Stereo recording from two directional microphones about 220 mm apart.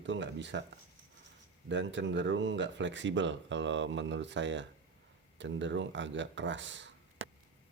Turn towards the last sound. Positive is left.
turn(degrees=-55)  # may be behind; listen again after turning